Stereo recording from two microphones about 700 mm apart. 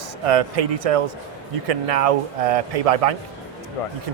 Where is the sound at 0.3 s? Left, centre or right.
Right.